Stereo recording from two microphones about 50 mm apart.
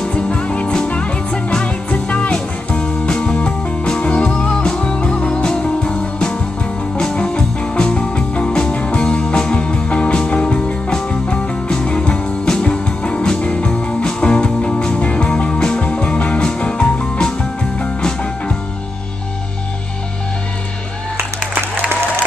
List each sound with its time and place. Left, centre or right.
0.0 s music: left
21.7 s applause: right